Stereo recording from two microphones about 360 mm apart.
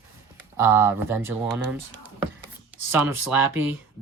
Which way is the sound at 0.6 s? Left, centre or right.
Centre.